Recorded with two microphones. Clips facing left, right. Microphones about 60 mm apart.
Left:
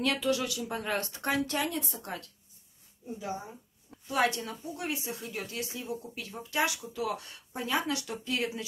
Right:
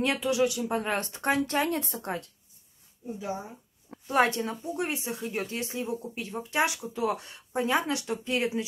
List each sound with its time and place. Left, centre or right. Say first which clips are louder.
0.0 s speech: right 4 dB; right
0.6 s speech: right 4 dB; right
3.9 s a woman's voice: right 4 dB; right